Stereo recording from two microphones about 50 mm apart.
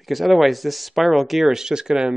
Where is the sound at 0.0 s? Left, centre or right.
Centre.